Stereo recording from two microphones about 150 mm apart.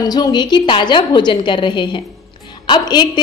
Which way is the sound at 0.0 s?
25° left (ahead or behind).